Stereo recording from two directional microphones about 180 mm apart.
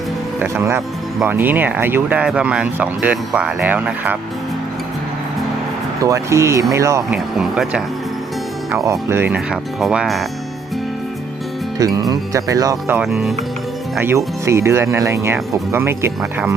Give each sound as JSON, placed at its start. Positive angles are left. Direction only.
{"t": 0.3, "sound": "speech", "side_deg": -15}
{"t": 6.0, "sound": "speech", "side_deg": -15}
{"t": 7.3, "sound": "speech", "side_deg": -5}
{"t": 8.7, "sound": "speech", "side_deg": -15}
{"t": 11.9, "sound": "speech", "side_deg": -20}
{"t": 13.0, "sound": "speech", "side_deg": 0}
{"t": 14.0, "sound": "speech", "side_deg": -15}